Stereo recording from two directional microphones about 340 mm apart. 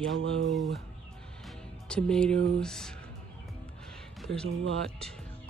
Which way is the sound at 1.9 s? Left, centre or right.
Centre.